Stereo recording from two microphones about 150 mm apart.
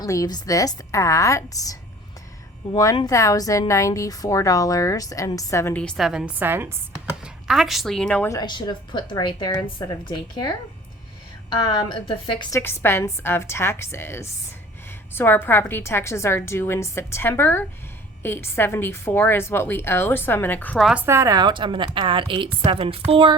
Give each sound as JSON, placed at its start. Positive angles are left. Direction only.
{"t": 0.0, "sound": "a woman's voice", "side_deg": 25}
{"t": 5.8, "sound": "a woman's voice", "side_deg": 5}
{"t": 6.1, "sound": "a woman's voice", "side_deg": -5}
{"t": 7.4, "sound": "a woman's voice", "side_deg": 0}
{"t": 8.3, "sound": "a woman's voice", "side_deg": 30}
{"t": 12.5, "sound": "a woman's voice", "side_deg": 15}
{"t": 20.8, "sound": "a woman's voice", "side_deg": -10}